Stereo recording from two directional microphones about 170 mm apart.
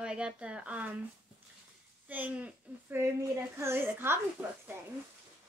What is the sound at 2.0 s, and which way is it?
A woman's voice, 10° right (ahead or behind).